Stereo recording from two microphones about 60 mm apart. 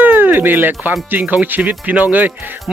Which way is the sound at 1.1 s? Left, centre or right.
Right.